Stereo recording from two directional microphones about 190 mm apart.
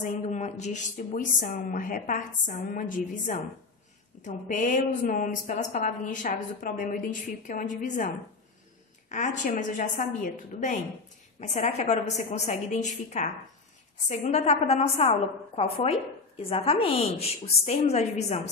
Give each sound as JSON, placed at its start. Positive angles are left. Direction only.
{"t": 0.0, "sound": "a woman's voice", "side_deg": 35}
{"t": 9.1, "sound": "a woman's voice", "side_deg": 40}